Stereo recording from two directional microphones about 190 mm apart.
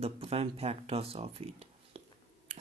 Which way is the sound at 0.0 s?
30° right (ahead or behind).